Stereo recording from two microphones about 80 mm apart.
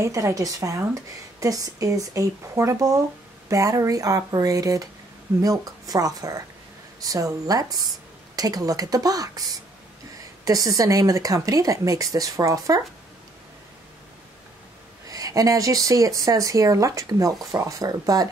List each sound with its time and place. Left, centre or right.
0.0 s speech: right
15.0 s speech: right